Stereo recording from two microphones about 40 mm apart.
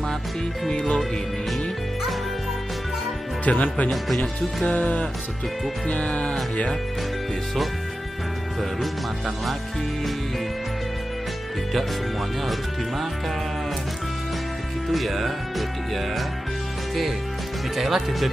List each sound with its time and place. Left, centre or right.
0.7 s music: centre
3.4 s speech: left
5.9 s music: left
14.9 s music: centre
17.7 s music: centre